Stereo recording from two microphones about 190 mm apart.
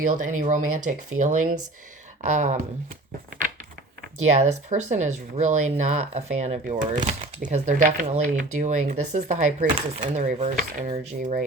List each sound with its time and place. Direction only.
0.1 s speech: 40° right (ahead or behind)
4.4 s speech: 40° right (ahead or behind)